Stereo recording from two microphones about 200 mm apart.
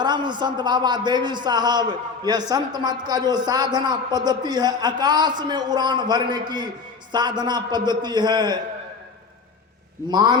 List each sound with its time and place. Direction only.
0.0 s a man's voice: 20° right (ahead or behind)
10.1 s a man's voice: 20° right (ahead or behind)